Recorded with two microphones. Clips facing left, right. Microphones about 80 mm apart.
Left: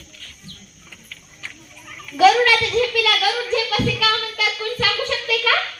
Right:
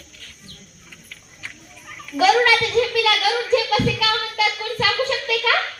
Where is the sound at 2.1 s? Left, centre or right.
Right.